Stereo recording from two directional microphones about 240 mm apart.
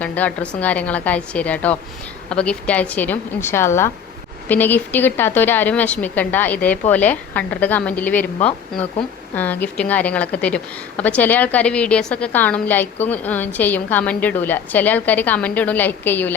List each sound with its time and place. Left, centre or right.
0.0 s a woman's voice: centre
9.3 s a woman's voice: centre